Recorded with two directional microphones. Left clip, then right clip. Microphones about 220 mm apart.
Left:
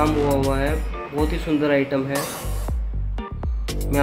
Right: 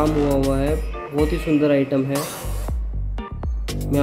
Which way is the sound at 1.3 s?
55° right (ahead or behind).